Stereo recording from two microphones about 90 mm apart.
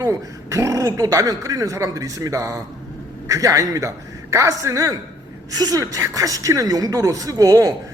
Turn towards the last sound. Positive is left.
turn(degrees=-40)  # may be behind; listen again after turning